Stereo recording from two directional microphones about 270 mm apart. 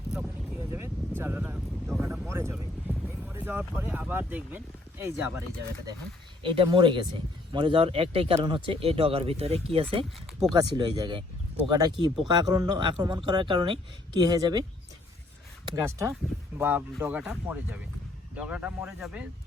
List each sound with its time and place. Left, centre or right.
0.1 s a sound: centre
3.8 s speech: centre
6.4 s speech: centre
15.6 s speech: centre